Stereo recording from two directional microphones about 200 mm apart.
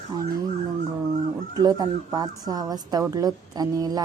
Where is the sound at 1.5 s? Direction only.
20° right (ahead or behind).